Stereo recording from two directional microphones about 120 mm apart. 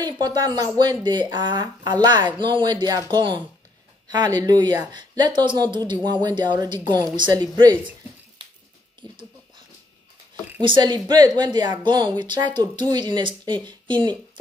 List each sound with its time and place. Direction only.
0.0 s speech: 35° right (ahead or behind)
10.6 s speech: 40° right (ahead or behind)